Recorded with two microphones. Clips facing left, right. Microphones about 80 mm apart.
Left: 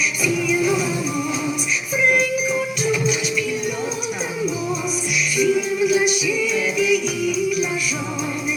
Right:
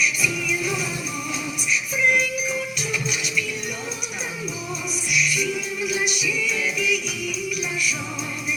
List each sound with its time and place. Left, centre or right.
0.2 s music: left
5.4 s music: left